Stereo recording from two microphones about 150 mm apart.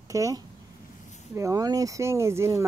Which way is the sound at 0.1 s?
20° right (ahead or behind).